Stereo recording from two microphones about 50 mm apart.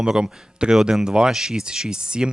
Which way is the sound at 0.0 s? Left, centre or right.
Centre.